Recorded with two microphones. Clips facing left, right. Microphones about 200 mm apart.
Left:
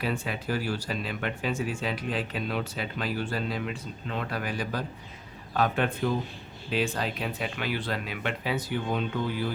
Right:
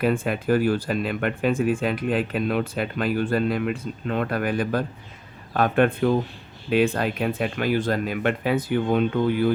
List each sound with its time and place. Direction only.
0.0 s speech: 50° right (ahead or behind)